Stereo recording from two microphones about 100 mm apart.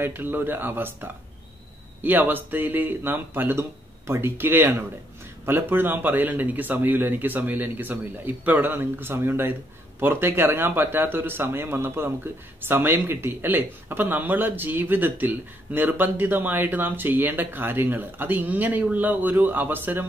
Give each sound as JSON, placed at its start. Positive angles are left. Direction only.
{"t": 0.0, "sound": "speech", "side_deg": -20}